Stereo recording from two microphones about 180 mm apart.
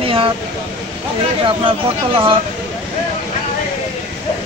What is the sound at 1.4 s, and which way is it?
Speech, 30° right (ahead or behind).